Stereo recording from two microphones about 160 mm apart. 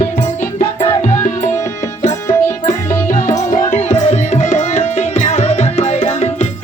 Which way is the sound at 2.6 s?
50° left (ahead or behind).